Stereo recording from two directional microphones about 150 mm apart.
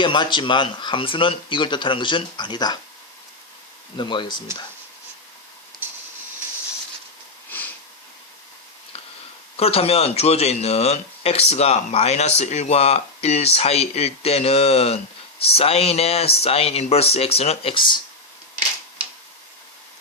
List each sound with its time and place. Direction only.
0.0 s speech: 30° left (ahead or behind)
3.9 s speech: 30° left (ahead or behind)
7.5 s sniff: 10° left (ahead or behind)
9.6 s speech: 40° left (ahead or behind)